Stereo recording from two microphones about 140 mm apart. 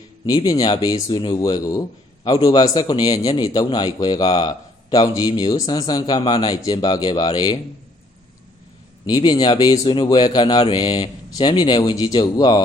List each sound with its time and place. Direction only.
0.3 s a man's voice: 25° left (ahead or behind)
9.0 s a man's voice: 30° left (ahead or behind)